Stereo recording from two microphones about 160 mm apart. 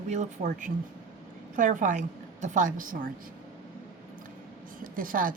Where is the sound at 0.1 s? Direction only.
50° right (ahead or behind).